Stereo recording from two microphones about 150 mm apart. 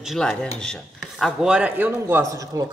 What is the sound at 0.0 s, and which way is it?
A man's voice, centre (ahead or behind).